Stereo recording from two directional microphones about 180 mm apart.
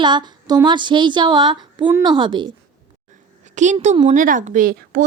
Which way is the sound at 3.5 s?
40° right (ahead or behind).